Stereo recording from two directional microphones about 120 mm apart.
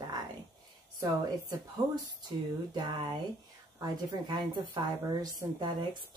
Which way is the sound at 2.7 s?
35° right (ahead or behind).